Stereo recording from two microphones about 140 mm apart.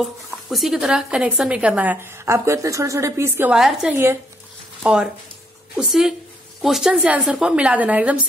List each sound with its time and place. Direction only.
0.0 s a woman's voice: centre (ahead or behind); by 3.5 s 15° right (ahead or behind)
3.5 s speech: 5° right (ahead or behind)
3.9 s a woman's voice: 15° right (ahead or behind)
4.8 s a woman's voice: 5° right (ahead or behind)